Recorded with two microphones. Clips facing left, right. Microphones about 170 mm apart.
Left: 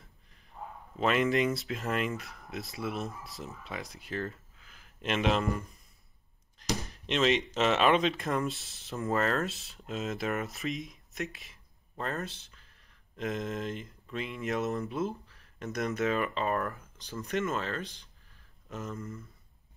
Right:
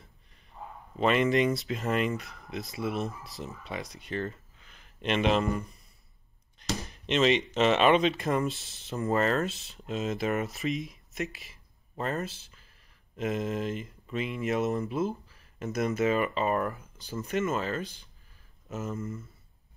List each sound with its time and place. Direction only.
0.9 s speech: centre (ahead or behind)
6.8 s speech: centre (ahead or behind)